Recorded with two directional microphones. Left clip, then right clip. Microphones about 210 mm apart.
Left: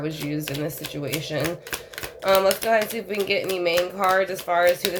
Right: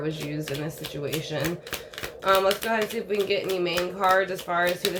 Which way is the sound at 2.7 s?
45° left (ahead or behind).